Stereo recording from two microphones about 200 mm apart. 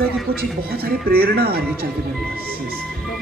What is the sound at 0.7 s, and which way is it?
Speech, 50° right (ahead or behind).